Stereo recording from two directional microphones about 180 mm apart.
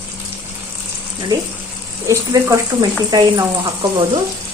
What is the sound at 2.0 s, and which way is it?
A woman's voice, 15° right (ahead or behind).